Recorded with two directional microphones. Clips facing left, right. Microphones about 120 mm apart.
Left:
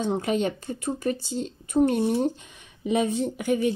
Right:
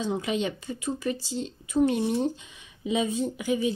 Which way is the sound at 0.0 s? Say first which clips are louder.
Left 3 dB; 50° left (ahead or behind).